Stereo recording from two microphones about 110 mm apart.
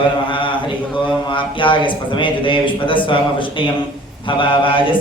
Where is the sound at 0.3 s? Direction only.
50° left (ahead or behind).